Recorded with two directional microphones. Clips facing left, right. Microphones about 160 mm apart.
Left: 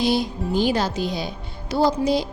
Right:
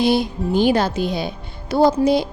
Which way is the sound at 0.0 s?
60° right (ahead or behind).